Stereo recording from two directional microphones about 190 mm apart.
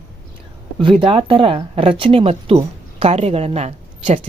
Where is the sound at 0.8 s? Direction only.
25° right (ahead or behind).